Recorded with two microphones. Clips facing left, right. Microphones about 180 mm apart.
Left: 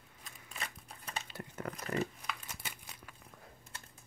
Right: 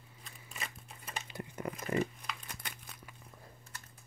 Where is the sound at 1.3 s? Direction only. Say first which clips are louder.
Right 5 dB; 10° right (ahead or behind).